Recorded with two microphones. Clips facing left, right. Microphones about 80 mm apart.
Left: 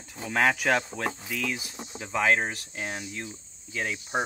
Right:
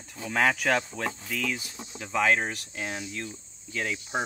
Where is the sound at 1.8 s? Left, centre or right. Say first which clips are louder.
Left 1 dB; left.